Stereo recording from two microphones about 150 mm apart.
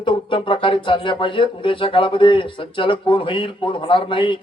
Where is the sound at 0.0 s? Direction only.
35° left (ahead or behind).